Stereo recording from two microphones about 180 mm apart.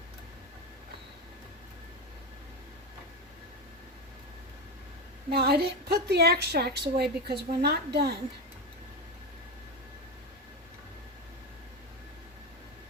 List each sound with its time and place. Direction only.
5.3 s a woman's voice: 60° right (ahead or behind)